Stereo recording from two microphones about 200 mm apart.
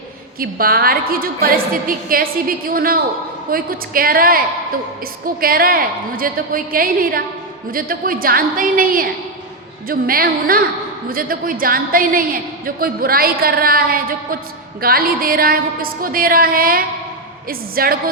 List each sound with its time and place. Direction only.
0.3 s a woman's voice: 50° right (ahead or behind)